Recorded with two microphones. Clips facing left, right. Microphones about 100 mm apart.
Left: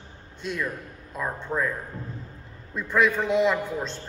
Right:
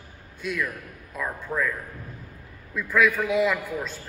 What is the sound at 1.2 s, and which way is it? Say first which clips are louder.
Speech: even; 25° left (ahead or behind).